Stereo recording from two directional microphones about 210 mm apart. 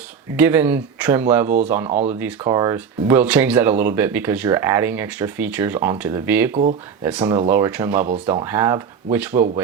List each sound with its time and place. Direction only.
0.3 s speech: 10° right (ahead or behind)